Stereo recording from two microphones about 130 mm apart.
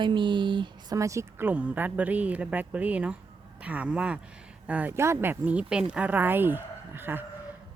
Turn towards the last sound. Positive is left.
turn(degrees=-15)  # may be behind; listen again after turning